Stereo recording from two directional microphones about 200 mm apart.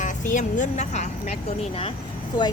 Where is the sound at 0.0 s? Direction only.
40° left (ahead or behind).